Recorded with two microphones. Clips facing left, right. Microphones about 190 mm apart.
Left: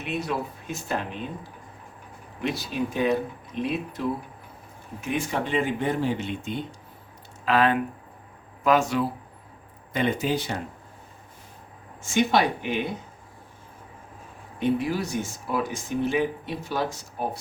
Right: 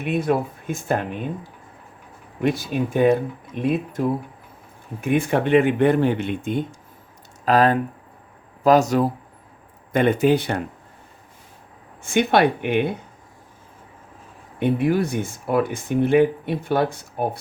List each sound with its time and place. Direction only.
0.0 s speech: 50° right (ahead or behind)
2.4 s speech: 50° right (ahead or behind)
9.9 s speech: 55° right (ahead or behind)
12.0 s speech: 60° right (ahead or behind)
14.6 s speech: 55° right (ahead or behind)